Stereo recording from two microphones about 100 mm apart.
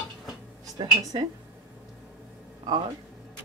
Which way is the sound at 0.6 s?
40° right (ahead or behind).